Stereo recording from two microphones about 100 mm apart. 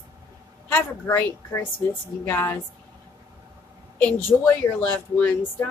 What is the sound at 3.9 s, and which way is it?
A woman's voice, 20° left (ahead or behind).